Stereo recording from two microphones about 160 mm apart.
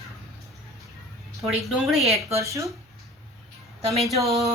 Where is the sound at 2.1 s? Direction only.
20° right (ahead or behind).